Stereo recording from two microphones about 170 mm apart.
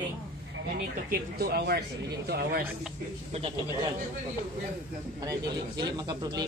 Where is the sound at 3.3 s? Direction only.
40° right (ahead or behind).